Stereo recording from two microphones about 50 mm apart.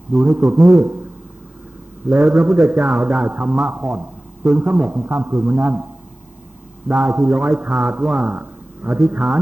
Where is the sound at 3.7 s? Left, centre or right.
Right.